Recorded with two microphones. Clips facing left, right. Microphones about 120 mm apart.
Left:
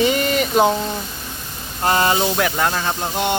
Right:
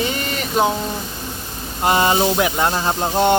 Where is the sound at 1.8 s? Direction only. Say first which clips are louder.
Right 1 dB; 20° right (ahead or behind).